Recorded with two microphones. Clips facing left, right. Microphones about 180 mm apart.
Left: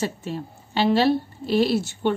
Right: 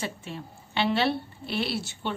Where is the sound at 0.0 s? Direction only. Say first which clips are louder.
Left 7 dB; 40° left (ahead or behind).